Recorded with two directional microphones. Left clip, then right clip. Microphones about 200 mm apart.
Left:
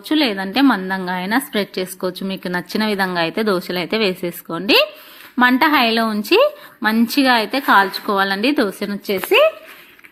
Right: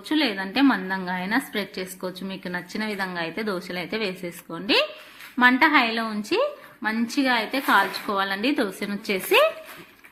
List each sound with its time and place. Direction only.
0.1 s a woman's voice: 35° left (ahead or behind)
9.4 s speech: 5° left (ahead or behind)